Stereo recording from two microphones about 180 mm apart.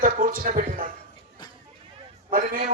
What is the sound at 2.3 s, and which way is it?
Speech, 45° right (ahead or behind).